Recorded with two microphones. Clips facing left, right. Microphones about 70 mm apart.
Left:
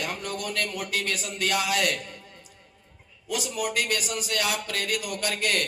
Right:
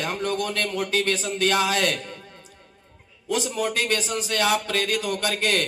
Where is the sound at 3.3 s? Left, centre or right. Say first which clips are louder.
Right 4 dB; right.